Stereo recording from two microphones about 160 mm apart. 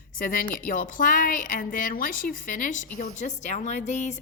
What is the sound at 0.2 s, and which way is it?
A woman's voice, 60° left (ahead or behind).